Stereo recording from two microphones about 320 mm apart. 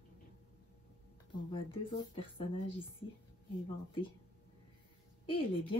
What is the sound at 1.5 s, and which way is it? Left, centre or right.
Speech, centre.